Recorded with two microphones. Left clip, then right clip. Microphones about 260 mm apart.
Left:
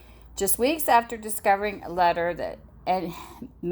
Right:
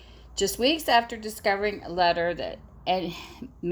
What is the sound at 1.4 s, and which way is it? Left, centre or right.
A woman's voice, left.